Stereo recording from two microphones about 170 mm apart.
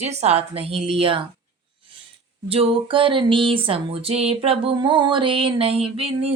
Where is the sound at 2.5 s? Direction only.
35° right (ahead or behind).